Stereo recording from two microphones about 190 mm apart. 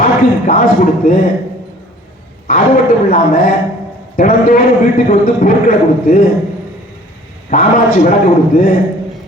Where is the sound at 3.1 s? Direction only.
50° left (ahead or behind).